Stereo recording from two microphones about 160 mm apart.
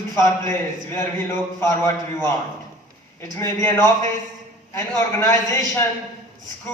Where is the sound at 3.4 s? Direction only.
15° left (ahead or behind).